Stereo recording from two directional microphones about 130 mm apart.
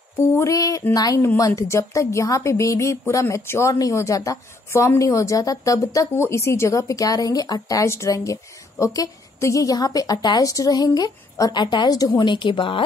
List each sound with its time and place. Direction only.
0.4 s a woman's voice: 25° left (ahead or behind); by 12.8 s 40° left (ahead or behind)